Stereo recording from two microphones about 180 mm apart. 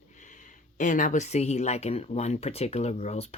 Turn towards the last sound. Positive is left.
turn(degrees=35)  # may be behind; listen again after turning